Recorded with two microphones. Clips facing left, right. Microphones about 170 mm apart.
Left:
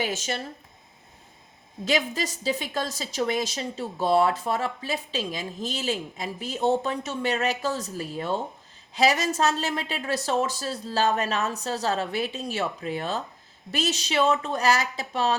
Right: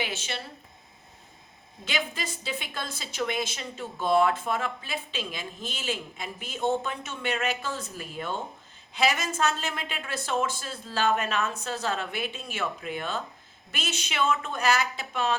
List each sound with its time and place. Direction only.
0.0 s speech: 40° left (ahead or behind)
1.8 s a woman's voice: 40° left (ahead or behind)